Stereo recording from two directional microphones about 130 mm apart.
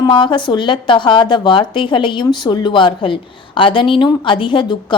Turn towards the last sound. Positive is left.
turn(degrees=40)  # may be behind; listen again after turning